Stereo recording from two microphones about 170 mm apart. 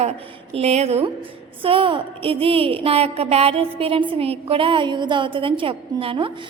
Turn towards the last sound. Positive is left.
turn(degrees=-35)  # may be behind; listen again after turning